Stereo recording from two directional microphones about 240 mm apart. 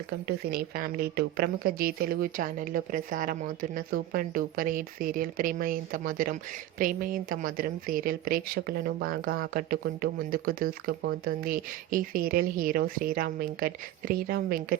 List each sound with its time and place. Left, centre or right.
0.3 s speech: right